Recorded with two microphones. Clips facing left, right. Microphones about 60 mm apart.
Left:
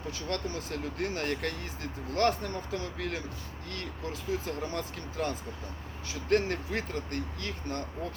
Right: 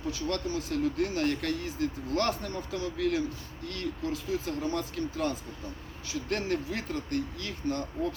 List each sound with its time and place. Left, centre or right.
0.1 s speech: left